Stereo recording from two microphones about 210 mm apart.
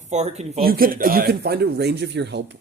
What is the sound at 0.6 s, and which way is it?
Speech, 45° right (ahead or behind).